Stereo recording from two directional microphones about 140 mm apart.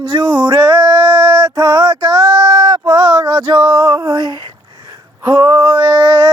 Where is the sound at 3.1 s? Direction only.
25° right (ahead or behind).